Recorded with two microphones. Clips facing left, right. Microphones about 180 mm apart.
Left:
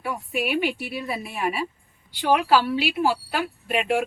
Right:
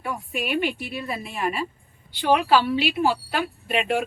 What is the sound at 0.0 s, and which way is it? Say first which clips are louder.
A woman's voice: left 2 dB; 5° left (ahead or behind).